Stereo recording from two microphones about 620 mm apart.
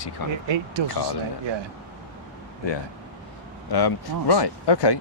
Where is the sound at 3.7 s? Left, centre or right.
Left.